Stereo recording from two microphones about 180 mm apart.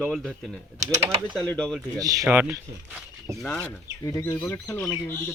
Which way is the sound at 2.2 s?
10° right (ahead or behind).